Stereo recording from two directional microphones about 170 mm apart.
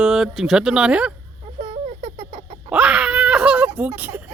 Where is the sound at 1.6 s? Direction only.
35° right (ahead or behind).